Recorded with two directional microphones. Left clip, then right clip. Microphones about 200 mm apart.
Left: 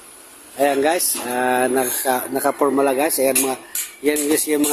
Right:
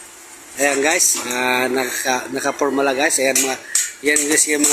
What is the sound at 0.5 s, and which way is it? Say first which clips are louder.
Speech: even; 15° left (ahead or behind).